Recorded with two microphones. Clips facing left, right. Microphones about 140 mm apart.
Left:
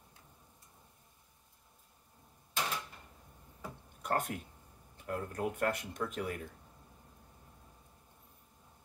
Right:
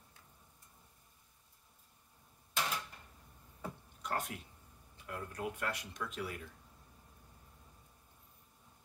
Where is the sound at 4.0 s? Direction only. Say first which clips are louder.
Left 5 dB; 50° left (ahead or behind).